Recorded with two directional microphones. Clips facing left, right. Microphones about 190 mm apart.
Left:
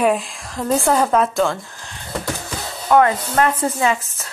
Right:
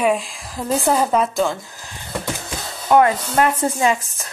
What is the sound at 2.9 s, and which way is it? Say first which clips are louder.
Speech: even; 15° right (ahead or behind).